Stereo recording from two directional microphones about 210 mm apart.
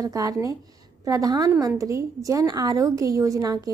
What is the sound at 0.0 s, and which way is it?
A woman's voice, 15° right (ahead or behind).